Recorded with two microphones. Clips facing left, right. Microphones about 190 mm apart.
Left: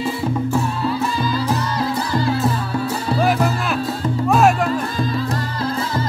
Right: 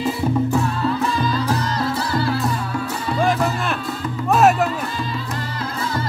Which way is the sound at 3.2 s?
5° left (ahead or behind).